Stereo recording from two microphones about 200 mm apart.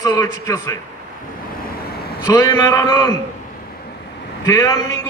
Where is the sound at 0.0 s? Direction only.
15° left (ahead or behind).